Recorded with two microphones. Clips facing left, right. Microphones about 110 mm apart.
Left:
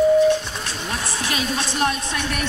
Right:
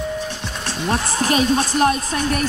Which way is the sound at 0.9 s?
40° right (ahead or behind).